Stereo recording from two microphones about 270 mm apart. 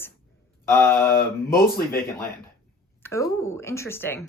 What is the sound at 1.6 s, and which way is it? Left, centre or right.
Speech, left.